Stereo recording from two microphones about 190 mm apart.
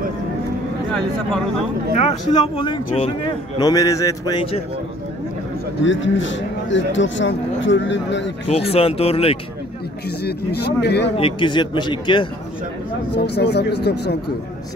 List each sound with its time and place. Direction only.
2.0 s speech: 30° left (ahead or behind)
5.9 s speech: 75° left (ahead or behind)
8.5 s speech: 30° left (ahead or behind)
10.2 s speech: 60° left (ahead or behind)
11.1 s speech: 25° left (ahead or behind)
13.1 s speech: 60° left (ahead or behind)